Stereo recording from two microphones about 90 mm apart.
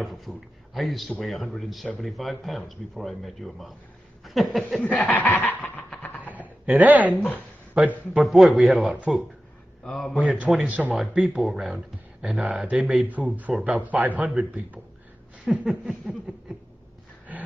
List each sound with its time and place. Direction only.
0.0 s a sound: centre (ahead or behind)
1.2 s speech: 5° left (ahead or behind)
4.2 s a sound: centre (ahead or behind)
4.7 s snicker: 15° left (ahead or behind)
5.3 s a sound: 20° left (ahead or behind)
6.3 s a sound: 15° right (ahead or behind)
7.2 s snicker: 20° left (ahead or behind)
7.7 s speech: 15° right (ahead or behind)
8.2 s speech: centre (ahead or behind)
10.1 s speech: 15° right (ahead or behind)
11.0 s speech: 5° right (ahead or behind)
15.4 s speech: 10° right (ahead or behind)
17.3 s wild animals: 15° right (ahead or behind)